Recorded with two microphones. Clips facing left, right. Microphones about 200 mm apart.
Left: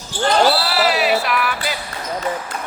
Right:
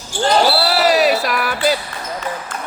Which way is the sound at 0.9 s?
40° right (ahead or behind).